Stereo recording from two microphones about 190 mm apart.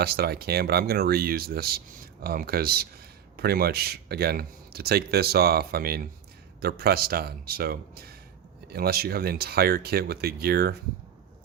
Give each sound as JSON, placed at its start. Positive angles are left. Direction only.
{"t": 0.0, "sound": "speech", "side_deg": -55}